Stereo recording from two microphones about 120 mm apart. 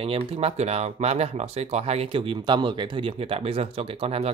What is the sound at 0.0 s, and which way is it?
Speech, 55° right (ahead or behind).